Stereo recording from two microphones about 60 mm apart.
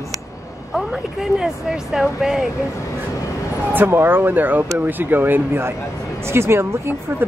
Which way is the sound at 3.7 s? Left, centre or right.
Right.